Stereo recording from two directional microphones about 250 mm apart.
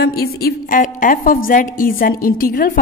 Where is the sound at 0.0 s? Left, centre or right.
Left.